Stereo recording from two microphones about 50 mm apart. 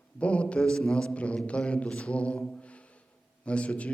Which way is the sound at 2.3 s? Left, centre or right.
Left.